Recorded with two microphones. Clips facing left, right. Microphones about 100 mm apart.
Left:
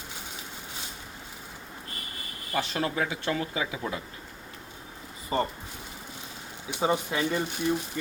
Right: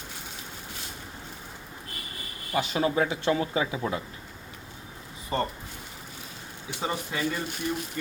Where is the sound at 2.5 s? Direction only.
10° right (ahead or behind).